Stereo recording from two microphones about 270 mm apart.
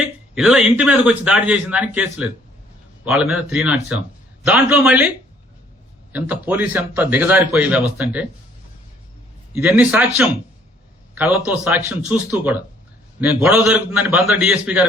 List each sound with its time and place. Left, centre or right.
0.3 s a man's voice: centre
6.1 s a man's voice: centre
9.6 s a man's voice: centre
11.1 s a man's voice: centre